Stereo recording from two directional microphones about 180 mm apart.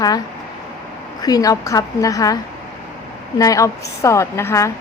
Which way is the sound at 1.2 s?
20° left (ahead or behind).